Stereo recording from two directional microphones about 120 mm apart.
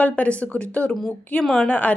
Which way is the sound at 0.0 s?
10° left (ahead or behind).